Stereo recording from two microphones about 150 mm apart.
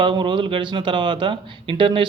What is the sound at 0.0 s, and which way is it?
Speech, 30° right (ahead or behind).